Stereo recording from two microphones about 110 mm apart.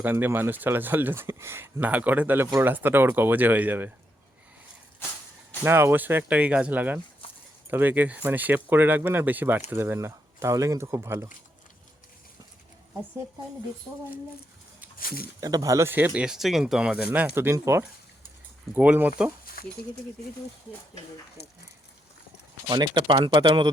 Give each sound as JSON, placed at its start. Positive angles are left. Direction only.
{"t": 0.0, "sound": "speech", "side_deg": -20}
{"t": 5.6, "sound": "speech", "side_deg": -20}
{"t": 15.4, "sound": "speech", "side_deg": -30}
{"t": 22.7, "sound": "speech", "side_deg": -40}